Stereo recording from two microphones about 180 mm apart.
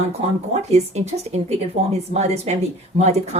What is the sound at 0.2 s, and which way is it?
A woman's voice, 35° right (ahead or behind).